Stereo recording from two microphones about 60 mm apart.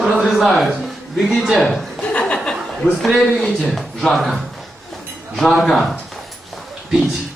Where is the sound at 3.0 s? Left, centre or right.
Centre.